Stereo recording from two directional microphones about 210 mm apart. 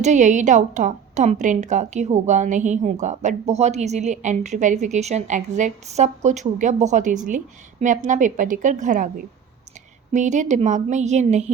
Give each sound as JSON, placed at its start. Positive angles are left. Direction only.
{"t": 0.0, "sound": "a woman's voice", "side_deg": -35}
{"t": 10.1, "sound": "a woman's voice", "side_deg": -35}